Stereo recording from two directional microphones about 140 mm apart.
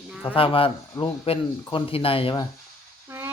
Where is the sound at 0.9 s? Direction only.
15° left (ahead or behind).